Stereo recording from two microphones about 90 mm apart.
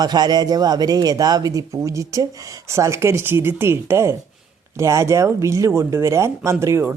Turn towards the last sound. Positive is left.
turn(degrees=-30)  # may be behind; listen again after turning